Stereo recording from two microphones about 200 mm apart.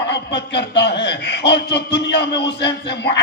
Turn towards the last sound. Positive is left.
turn(degrees=60)  # may be behind; listen again after turning